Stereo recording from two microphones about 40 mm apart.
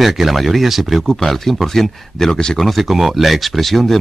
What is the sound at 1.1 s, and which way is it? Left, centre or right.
Speech, centre.